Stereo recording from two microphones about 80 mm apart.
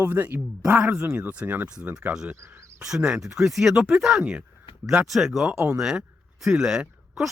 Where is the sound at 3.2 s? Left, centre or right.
Centre.